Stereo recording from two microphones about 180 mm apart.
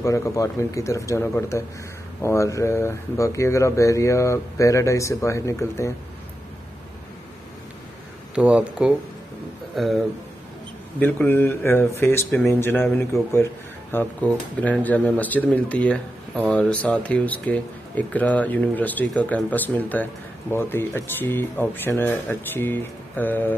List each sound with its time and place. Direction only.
0.0 s speech: 15° left (ahead or behind)
8.4 s speech: 5° right (ahead or behind); by 23.5 s 10° left (ahead or behind)